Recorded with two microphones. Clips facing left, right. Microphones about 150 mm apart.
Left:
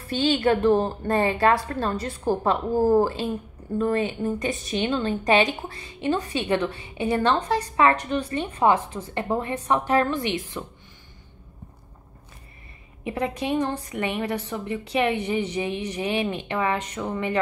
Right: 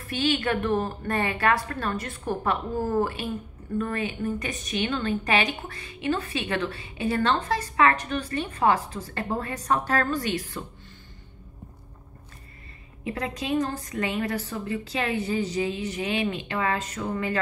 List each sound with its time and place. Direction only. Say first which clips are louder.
0.1 s a woman's voice: left 4 dB; 30° left (ahead or behind)
13.0 s a woman's voice: left 4 dB; 30° left (ahead or behind)
15.1 s a woman's voice: left 1 dB; 35° right (ahead or behind)
15.5 s a woman's voice: even; 25° left (ahead or behind)